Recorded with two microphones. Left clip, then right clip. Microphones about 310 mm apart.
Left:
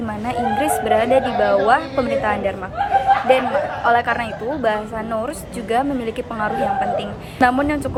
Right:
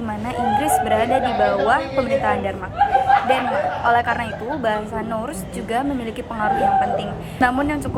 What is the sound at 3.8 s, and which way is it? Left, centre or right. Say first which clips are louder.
A woman's voice: left 2 dB; centre.